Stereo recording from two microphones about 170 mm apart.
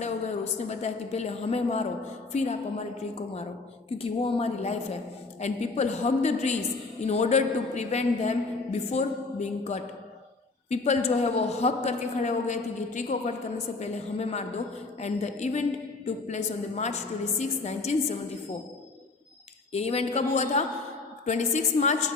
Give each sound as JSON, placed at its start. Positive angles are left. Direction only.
{"t": 0.7, "sound": "a man's voice", "side_deg": 40}
{"t": 19.7, "sound": "a man's voice", "side_deg": 35}